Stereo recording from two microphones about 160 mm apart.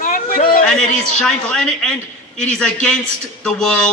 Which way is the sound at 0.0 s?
55° left (ahead or behind).